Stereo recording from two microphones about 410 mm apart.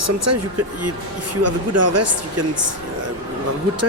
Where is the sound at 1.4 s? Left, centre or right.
Right.